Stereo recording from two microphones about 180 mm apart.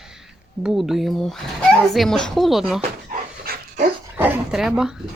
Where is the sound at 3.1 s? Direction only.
45° right (ahead or behind).